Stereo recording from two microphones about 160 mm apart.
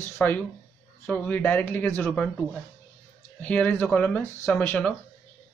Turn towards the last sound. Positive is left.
turn(degrees=10)  # may be behind; listen again after turning